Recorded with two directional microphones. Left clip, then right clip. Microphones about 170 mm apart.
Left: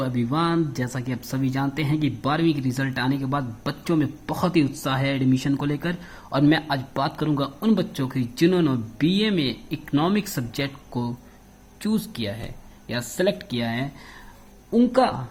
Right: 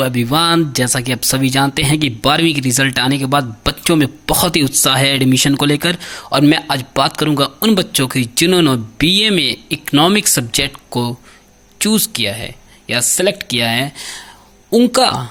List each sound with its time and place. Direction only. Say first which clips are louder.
0.0 s speech: right 10 dB; 40° right (ahead or behind)